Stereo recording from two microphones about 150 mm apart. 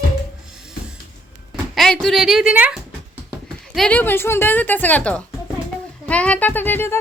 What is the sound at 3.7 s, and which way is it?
A woman's voice, 5° left (ahead or behind).